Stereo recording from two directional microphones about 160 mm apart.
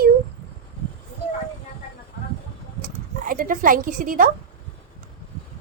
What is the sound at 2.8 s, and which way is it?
Speech, 60° right (ahead or behind).